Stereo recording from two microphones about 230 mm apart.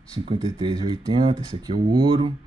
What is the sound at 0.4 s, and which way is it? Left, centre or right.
Speech, centre.